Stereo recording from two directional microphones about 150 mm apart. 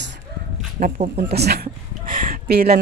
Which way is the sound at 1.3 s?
90° right.